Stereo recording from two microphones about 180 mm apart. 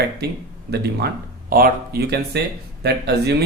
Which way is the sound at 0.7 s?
65° right (ahead or behind).